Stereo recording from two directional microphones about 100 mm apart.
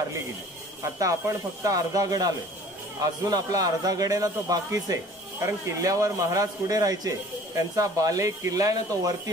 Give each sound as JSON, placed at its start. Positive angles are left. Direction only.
{"t": 0.9, "sound": "a man's voice", "side_deg": -35}